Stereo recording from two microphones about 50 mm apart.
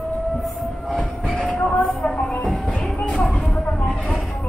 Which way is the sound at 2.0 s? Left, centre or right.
Left.